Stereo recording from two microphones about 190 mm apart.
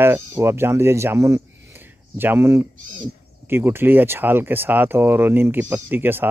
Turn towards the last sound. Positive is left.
turn(degrees=-10)  # may be behind; listen again after turning